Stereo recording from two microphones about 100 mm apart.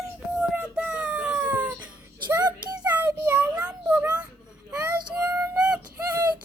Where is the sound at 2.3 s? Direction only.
40° right (ahead or behind).